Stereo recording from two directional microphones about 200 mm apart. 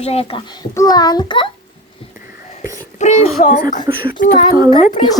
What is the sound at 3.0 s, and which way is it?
A child's voice, 35° left (ahead or behind).